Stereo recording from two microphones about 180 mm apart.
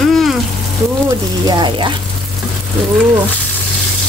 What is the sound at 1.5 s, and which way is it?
Speech, 25° right (ahead or behind).